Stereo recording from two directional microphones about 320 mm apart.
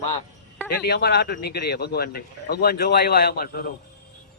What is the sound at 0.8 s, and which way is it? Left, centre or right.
Speech, left.